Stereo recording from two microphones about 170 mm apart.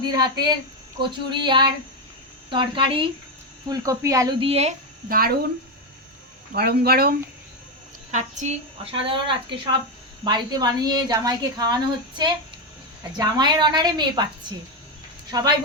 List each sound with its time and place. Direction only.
0.0 s a woman's voice: 25° right (ahead or behind)
3.7 s a woman's voice: 20° right (ahead or behind)
4.4 s a woman's voice: 35° right (ahead or behind)
5.0 s speech: 60° right (ahead or behind)
6.5 s speech: 65° right (ahead or behind)
8.1 s a woman's voice: 40° right (ahead or behind)
10.2 s a woman's voice: 25° right (ahead or behind)
15.3 s a woman's voice: 25° right (ahead or behind)